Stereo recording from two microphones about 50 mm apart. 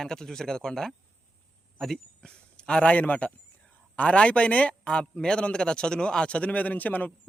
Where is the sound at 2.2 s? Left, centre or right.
Centre; by 7.1 s left.